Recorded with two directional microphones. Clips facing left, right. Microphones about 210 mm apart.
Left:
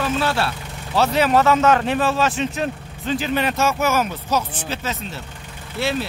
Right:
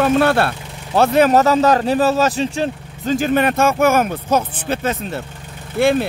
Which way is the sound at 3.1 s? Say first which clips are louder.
Right 6 dB; 50° right (ahead or behind).